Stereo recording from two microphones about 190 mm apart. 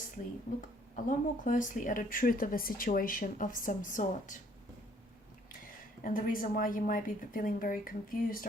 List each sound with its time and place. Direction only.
0.9 s speech: 45° left (ahead or behind)
5.6 s speech: 45° left (ahead or behind)